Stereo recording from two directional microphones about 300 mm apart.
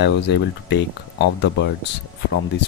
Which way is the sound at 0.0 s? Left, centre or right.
Left.